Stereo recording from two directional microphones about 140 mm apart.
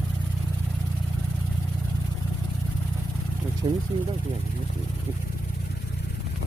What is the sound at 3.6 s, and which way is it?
Speech, 30° right (ahead or behind).